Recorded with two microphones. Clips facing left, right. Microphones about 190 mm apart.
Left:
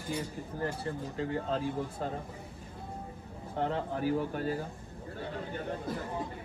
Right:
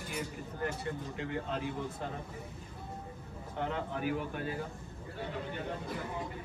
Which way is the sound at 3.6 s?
35° left (ahead or behind).